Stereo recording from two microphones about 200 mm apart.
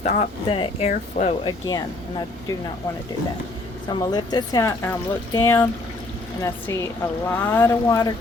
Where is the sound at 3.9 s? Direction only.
20° left (ahead or behind).